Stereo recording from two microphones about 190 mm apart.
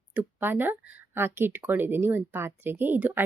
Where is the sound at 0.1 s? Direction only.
10° right (ahead or behind).